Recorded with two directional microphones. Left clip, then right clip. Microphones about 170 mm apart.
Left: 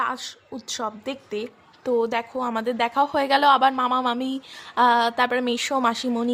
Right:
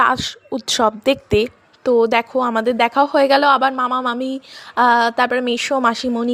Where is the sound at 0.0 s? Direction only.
40° right (ahead or behind).